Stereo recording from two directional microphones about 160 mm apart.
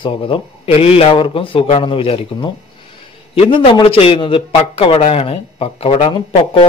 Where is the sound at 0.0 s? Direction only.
30° left (ahead or behind).